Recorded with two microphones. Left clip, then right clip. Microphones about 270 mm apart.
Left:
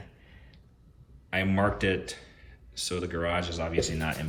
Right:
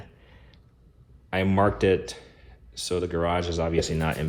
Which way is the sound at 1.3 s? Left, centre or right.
Centre.